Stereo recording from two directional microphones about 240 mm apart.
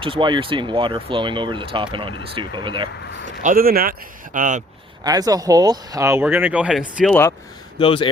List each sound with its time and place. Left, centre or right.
0.0 s speech: right
3.4 s a man's voice: right
5.0 s speech: centre
7.8 s speech: left